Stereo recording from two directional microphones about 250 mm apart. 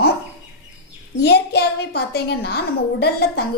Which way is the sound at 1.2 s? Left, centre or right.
Left.